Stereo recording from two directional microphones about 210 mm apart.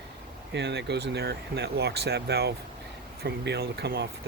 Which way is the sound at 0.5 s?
55° right (ahead or behind).